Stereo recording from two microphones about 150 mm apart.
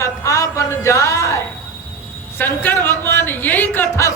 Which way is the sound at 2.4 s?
15° left (ahead or behind).